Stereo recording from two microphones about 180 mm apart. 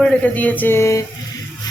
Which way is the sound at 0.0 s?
5° left (ahead or behind).